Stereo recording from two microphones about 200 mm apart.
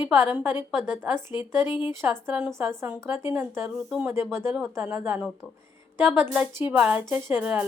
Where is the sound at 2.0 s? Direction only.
5° right (ahead or behind).